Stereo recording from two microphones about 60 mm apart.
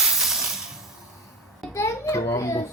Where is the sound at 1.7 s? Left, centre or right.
Left.